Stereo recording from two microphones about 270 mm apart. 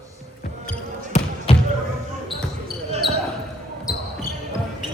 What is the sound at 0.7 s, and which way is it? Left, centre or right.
Basketball bounce, left.